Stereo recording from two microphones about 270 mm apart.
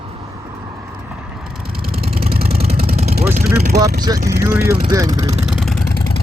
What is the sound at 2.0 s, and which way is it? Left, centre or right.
Vehicle, right.